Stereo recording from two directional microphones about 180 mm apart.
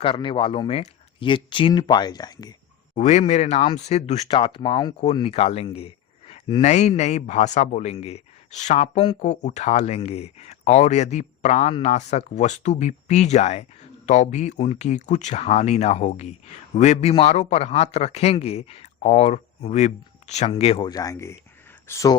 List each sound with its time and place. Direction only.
0.0 s speech: 30° left (ahead or behind)
2.9 s speech: 40° left (ahead or behind); by 22.1 s 15° left (ahead or behind)